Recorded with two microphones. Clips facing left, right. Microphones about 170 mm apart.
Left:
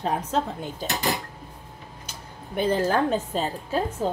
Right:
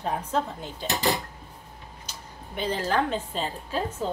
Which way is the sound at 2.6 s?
50° left (ahead or behind).